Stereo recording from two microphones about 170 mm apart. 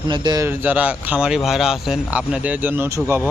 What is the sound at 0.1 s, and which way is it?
Speech, 25° right (ahead or behind).